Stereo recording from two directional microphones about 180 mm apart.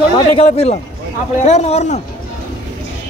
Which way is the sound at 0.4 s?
35° left (ahead or behind).